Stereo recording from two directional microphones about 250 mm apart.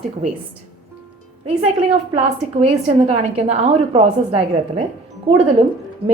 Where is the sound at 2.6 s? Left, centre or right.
Right.